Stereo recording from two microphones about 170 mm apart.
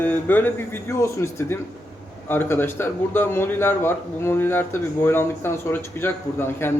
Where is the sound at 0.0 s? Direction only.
10° left (ahead or behind).